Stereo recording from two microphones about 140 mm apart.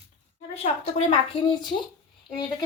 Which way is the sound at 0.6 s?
50° left (ahead or behind).